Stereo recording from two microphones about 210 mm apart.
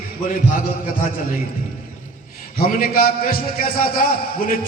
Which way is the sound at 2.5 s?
45° left (ahead or behind).